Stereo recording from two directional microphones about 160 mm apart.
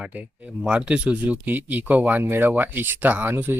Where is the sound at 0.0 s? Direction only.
5° right (ahead or behind).